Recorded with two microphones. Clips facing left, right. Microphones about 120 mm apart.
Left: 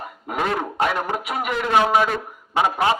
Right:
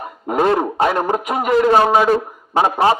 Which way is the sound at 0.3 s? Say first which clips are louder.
Right 8 dB; 40° right (ahead or behind).